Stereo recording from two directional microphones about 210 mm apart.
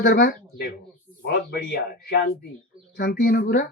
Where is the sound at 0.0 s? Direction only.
45° left (ahead or behind).